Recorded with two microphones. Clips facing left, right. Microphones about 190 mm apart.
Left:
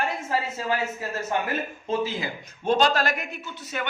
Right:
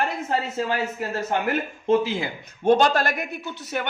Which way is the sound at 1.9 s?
60° right (ahead or behind).